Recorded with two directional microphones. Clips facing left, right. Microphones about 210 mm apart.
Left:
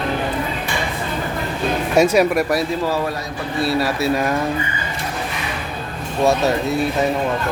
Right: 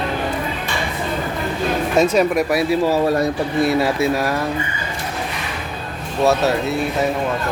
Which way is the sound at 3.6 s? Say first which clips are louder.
Right 2 dB; 20° right (ahead or behind).